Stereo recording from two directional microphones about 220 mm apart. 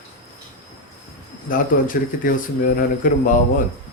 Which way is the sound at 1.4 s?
40° left (ahead or behind).